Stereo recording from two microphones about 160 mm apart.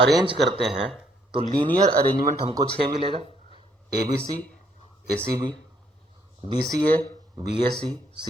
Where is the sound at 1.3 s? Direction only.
30° right (ahead or behind).